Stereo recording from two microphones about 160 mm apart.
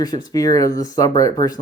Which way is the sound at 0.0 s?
25° left (ahead or behind).